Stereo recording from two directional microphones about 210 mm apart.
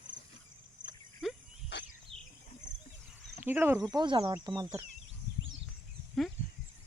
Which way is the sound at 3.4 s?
10° right (ahead or behind).